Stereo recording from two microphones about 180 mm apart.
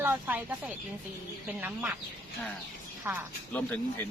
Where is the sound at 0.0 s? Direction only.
10° right (ahead or behind).